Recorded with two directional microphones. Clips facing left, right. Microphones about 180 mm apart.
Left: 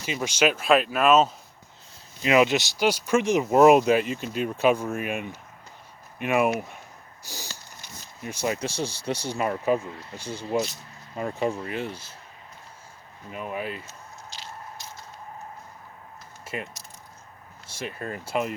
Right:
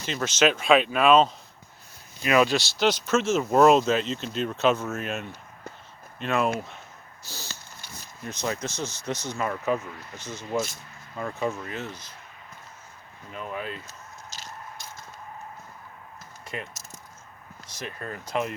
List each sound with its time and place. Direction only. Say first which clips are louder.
0.0 s speech: right 1 dB; 10° left (ahead or behind)
2.2 s speech: left 1 dB; 20° left (ahead or behind)
8.8 s speech: left 3 dB; 30° left (ahead or behind)
11.7 s speech: left 4 dB; 10° left (ahead or behind)
13.3 s speech: left 2 dB; 10° left (ahead or behind)
14.3 s biting: left 1 dB; 45° right (ahead or behind)
16.5 s speech: left 2 dB; 5° left (ahead or behind)
17.7 s speech: left 3 dB; 10° left (ahead or behind)